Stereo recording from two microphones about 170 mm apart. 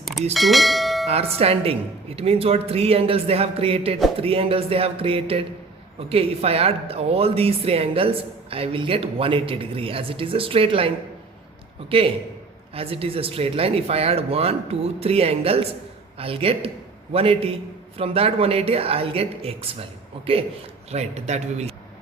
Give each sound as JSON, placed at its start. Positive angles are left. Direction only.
{"t": 0.3, "sound": "speech", "side_deg": 0}
{"t": 1.0, "sound": "a man's voice", "side_deg": -35}